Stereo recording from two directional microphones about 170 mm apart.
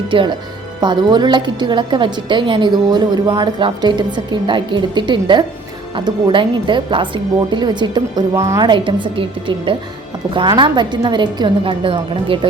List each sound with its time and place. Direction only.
0.1 s a woman's voice: 30° right (ahead or behind)